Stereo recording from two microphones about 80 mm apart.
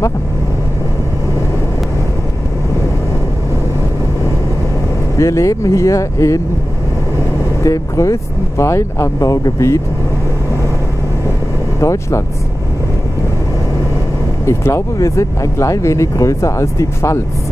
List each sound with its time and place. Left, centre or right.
5.1 s speech: left
7.6 s speech: left
11.8 s speech: left
14.4 s speech: left